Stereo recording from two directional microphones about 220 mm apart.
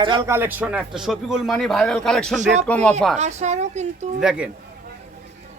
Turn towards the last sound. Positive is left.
turn(degrees=-5)  # may be behind; listen again after turning